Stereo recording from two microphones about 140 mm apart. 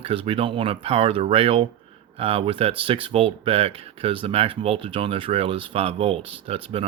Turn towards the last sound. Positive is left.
turn(degrees=-40)  # may be behind; listen again after turning